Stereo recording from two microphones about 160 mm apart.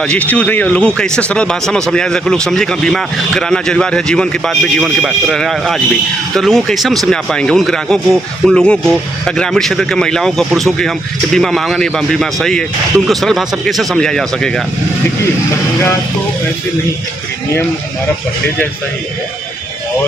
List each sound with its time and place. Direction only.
0.0 s speech: 5° left (ahead or behind)